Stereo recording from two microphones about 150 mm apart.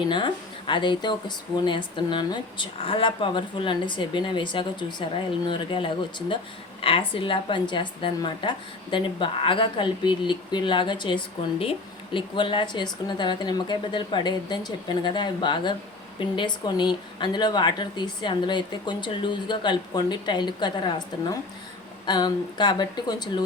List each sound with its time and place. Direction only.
0.7 s a woman's voice: 30° left (ahead or behind)